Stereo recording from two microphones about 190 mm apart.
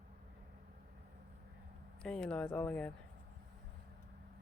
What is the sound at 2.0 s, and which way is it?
Speech, 5° left (ahead or behind).